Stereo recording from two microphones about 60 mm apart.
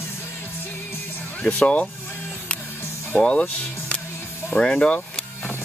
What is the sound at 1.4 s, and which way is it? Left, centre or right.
Speech, left.